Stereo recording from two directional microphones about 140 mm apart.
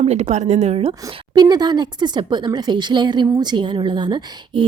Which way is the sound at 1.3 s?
30° right (ahead or behind).